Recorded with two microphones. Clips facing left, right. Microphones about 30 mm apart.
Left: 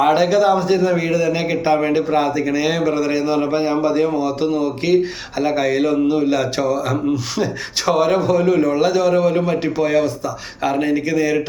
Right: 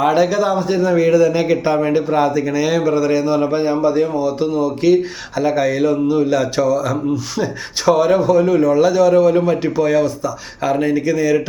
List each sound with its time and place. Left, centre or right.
0.1 s a man's voice: left
2.2 s a man's voice: left
4.2 s a man's voice: left
8.2 s a man's voice: left
10.9 s a man's voice: left